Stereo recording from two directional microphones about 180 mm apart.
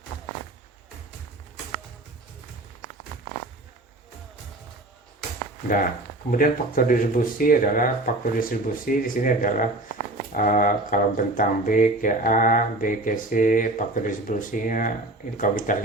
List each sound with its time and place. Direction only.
5.6 s speech: 50° left (ahead or behind)